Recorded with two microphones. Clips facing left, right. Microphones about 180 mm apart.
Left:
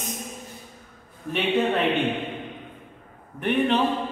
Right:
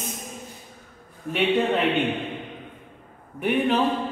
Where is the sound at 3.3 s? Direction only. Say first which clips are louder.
Even; 5° right (ahead or behind).